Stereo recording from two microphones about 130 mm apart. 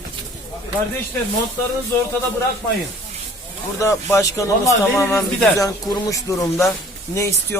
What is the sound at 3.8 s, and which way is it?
Speech, 25° left (ahead or behind).